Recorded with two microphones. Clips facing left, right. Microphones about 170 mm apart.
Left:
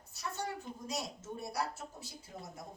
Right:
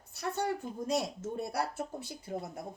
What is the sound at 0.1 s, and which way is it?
Speech, 60° right (ahead or behind).